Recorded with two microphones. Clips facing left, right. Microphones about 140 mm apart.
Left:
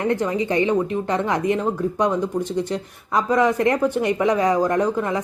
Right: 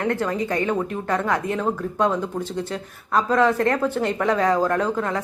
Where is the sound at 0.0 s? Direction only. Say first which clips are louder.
Left 2 dB; 20° left (ahead or behind).